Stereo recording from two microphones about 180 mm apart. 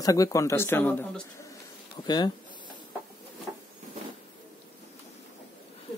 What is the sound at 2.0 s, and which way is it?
Speech, 25° left (ahead or behind).